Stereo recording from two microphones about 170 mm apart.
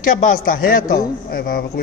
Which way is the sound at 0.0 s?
55° left (ahead or behind).